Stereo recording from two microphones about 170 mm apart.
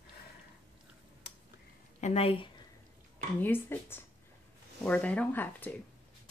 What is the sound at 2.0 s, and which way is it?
Speech, 35° left (ahead or behind).